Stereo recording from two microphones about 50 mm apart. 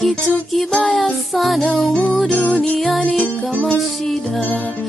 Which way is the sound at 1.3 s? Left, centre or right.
Centre.